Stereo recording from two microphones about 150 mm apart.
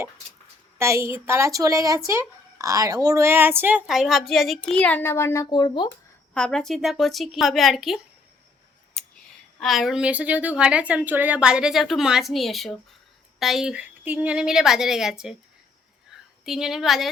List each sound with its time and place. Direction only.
0.8 s a woman's voice: 20° right (ahead or behind); by 5.9 s 30° left (ahead or behind)
6.3 s speech: 5° left (ahead or behind)
9.6 s speech: centre (ahead or behind)
16.5 s speech: 5° right (ahead or behind)